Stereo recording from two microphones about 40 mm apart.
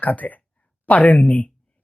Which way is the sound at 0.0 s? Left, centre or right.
Left.